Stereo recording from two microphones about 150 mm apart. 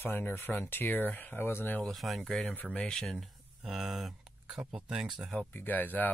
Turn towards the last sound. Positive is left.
turn(degrees=10)  # may be behind; listen again after turning